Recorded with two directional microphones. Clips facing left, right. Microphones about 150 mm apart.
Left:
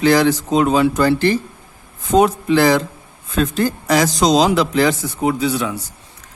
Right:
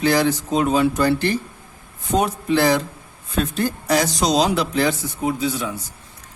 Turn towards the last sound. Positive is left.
turn(degrees=80)